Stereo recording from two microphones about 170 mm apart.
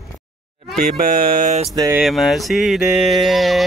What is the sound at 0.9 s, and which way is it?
Mantra, 60° right (ahead or behind).